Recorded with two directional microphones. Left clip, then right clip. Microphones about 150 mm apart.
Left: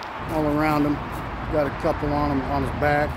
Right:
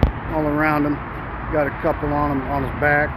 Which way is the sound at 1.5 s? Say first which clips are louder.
Right 3 dB; 10° left (ahead or behind).